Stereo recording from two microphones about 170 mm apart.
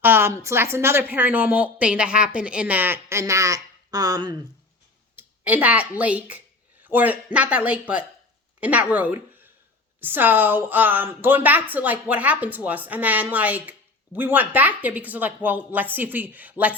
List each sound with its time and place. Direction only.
0.0 s a woman's voice: 15° right (ahead or behind)
5.1 s a woman's voice: 10° right (ahead or behind)